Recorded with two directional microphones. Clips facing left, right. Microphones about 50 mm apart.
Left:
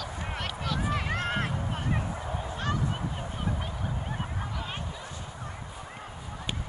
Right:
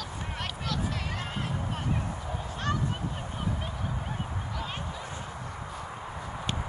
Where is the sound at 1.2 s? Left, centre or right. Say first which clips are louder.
Left 5 dB; left.